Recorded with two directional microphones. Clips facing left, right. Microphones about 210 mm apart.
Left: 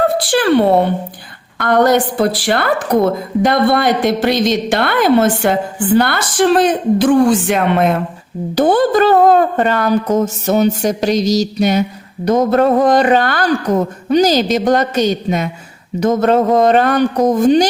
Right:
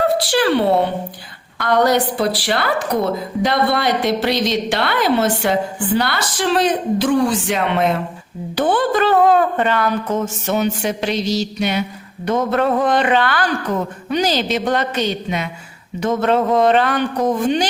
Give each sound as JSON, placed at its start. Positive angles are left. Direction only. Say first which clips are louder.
{"t": 0.3, "sound": "a woman's voice", "louder": "left 6 dB", "side_deg": 50}
{"t": 8.5, "sound": "speech", "louder": "left 5 dB", "side_deg": 40}